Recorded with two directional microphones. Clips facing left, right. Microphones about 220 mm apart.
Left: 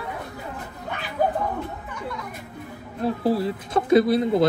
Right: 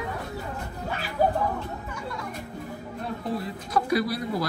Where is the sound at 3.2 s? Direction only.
30° left (ahead or behind).